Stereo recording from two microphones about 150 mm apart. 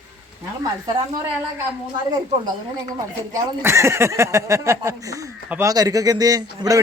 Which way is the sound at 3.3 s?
20° right (ahead or behind).